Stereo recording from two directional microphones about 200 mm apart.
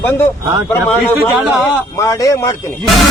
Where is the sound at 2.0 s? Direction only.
15° left (ahead or behind).